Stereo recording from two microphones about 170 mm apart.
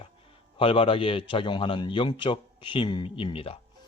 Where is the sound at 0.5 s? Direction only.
30° left (ahead or behind).